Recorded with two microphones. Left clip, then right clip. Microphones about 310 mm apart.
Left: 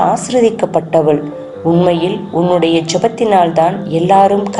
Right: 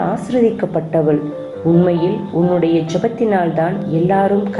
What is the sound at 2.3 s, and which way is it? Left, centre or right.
A woman's voice, left.